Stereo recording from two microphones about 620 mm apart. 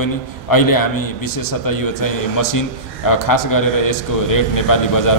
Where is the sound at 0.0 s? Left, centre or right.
Left.